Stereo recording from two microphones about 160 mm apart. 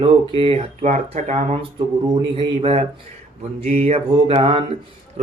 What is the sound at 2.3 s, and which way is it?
Speech, 35° right (ahead or behind).